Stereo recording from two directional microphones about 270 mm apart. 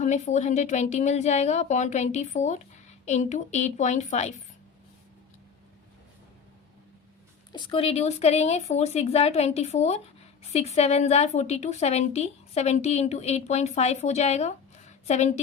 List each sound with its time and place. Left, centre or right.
0.0 s a woman's voice: left
7.5 s a woman's voice: centre